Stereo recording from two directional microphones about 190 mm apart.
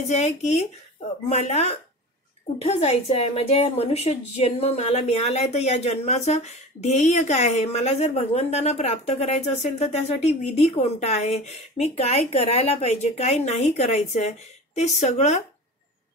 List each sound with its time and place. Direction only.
0.1 s speech: 35° left (ahead or behind)